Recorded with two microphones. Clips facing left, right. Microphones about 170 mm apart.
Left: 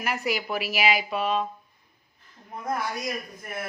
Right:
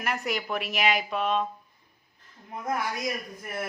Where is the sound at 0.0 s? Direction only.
Centre (ahead or behind).